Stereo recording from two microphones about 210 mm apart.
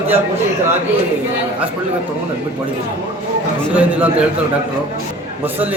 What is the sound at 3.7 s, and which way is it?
Speech, 5° right (ahead or behind).